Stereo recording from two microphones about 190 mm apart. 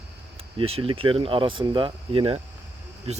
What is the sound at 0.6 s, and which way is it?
Speech, 30° right (ahead or behind).